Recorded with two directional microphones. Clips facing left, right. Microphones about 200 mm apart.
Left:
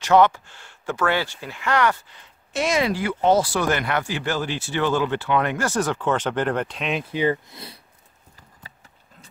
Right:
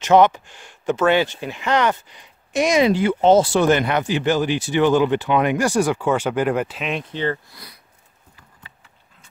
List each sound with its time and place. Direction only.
0.0 s speech: 20° right (ahead or behind); by 7.5 s 10° left (ahead or behind)
7.5 s speech: 25° left (ahead or behind)